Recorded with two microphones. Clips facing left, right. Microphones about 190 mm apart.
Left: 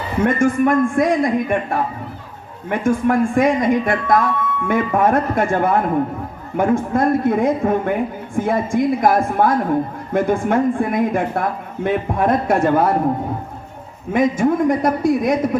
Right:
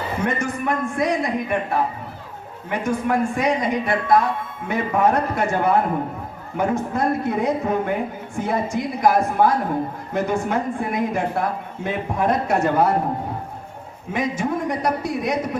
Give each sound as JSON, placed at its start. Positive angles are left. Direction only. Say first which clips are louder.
{"t": 0.2, "sound": "speech", "louder": "left 11 dB", "side_deg": 50}
{"t": 14.1, "sound": "speech", "louder": "left 7 dB", "side_deg": 50}